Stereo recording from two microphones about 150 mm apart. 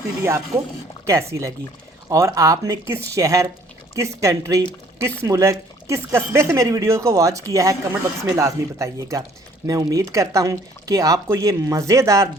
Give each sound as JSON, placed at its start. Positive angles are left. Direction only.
{"t": 0.5, "sound": "speech", "side_deg": -15}